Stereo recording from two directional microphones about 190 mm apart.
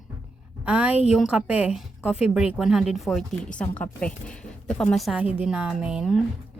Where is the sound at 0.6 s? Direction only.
5° right (ahead or behind).